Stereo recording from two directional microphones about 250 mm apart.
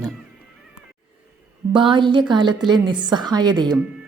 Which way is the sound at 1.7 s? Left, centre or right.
Centre.